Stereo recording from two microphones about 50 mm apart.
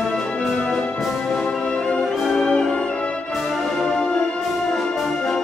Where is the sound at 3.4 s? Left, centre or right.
Centre.